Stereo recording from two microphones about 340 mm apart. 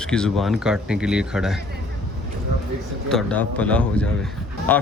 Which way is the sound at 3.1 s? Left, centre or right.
Centre.